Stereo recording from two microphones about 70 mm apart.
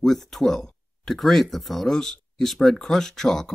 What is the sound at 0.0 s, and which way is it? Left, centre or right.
Speech, centre.